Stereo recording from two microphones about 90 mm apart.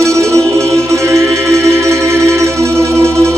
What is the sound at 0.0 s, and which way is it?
Music, 30° right (ahead or behind).